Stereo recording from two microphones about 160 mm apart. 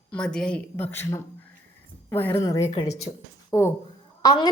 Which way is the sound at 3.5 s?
20° left (ahead or behind).